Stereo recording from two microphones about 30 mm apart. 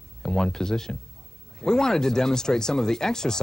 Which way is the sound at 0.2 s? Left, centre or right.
Left.